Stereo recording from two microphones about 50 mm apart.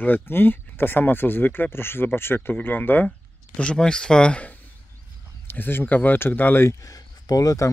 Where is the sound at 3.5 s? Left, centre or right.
Centre.